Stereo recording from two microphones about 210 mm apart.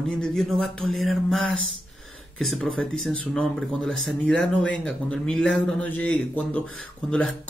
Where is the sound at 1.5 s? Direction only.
65° right (ahead or behind).